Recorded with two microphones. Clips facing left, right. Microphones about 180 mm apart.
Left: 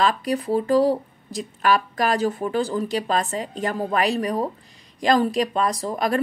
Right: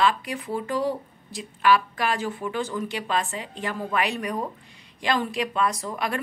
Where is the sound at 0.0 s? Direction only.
40° left (ahead or behind).